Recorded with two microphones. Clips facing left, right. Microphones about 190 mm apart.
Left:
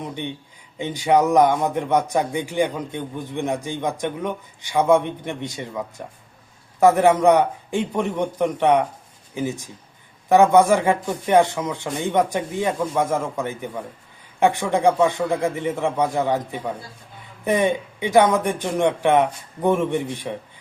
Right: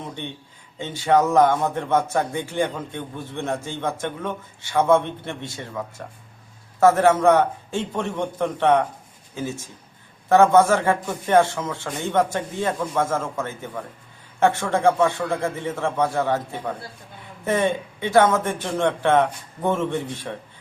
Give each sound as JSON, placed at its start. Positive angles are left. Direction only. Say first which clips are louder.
{"t": 0.0, "sound": "speech", "louder": "left 4 dB", "side_deg": 15}